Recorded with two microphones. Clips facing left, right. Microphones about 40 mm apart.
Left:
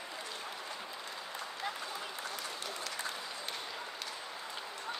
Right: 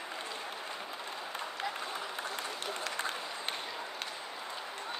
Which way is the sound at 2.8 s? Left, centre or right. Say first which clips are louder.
Right 5 dB; right.